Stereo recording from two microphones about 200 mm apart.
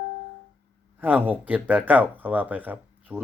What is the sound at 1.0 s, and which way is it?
Speech, 10° right (ahead or behind).